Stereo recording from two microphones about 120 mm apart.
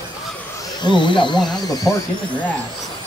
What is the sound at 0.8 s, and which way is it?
Speech, 40° left (ahead or behind).